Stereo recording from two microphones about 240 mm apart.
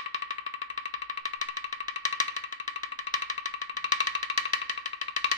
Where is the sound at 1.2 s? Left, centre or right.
Left.